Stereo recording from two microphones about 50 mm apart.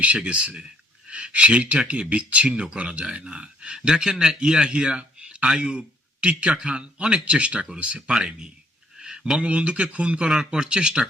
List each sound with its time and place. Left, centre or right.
0.3 s a man's voice: right
9.0 s a sound: centre
9.4 s a man's voice: right
10.3 s speech: centre